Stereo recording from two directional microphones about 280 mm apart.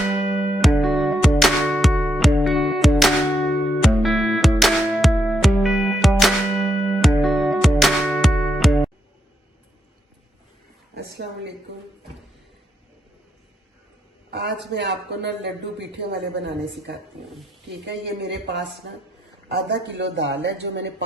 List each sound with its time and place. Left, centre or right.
0.1 s music: centre
10.9 s a sound: right
14.3 s a man's voice: right
17.8 s a man's voice: right